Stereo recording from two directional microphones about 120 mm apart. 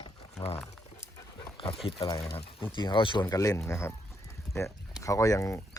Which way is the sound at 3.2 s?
25° left (ahead or behind).